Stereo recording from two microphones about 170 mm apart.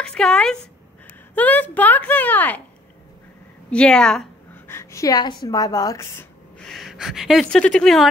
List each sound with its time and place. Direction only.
0.0 s speech: 5° left (ahead or behind)
3.7 s speech: 5° left (ahead or behind)
4.6 s a woman's voice: 15° left (ahead or behind)
6.6 s speech: centre (ahead or behind)